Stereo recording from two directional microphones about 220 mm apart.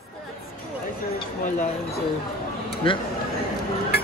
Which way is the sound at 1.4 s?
35° left (ahead or behind).